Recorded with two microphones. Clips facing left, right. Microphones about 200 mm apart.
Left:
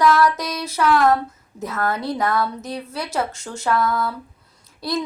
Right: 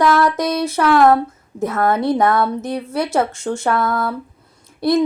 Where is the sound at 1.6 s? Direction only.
55° right (ahead or behind).